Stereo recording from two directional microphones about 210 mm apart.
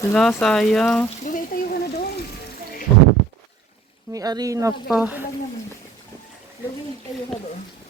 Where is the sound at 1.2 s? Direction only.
40° left (ahead or behind).